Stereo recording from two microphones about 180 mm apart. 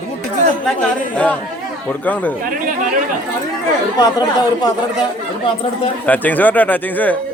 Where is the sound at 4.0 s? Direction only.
20° left (ahead or behind).